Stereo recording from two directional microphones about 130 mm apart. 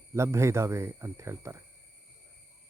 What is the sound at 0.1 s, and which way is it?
Speech, 20° right (ahead or behind).